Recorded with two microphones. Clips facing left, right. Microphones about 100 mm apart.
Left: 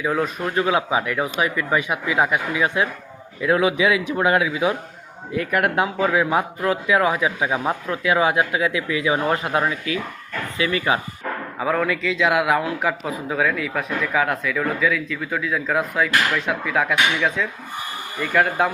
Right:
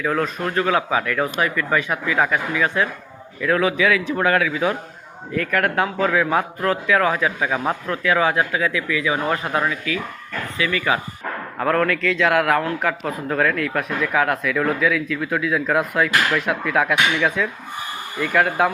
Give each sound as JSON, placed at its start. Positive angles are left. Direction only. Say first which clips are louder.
{"t": 0.0, "sound": "speech", "louder": "even", "side_deg": 10}
{"t": 11.6, "sound": "a man's voice", "louder": "right 2 dB", "side_deg": 5}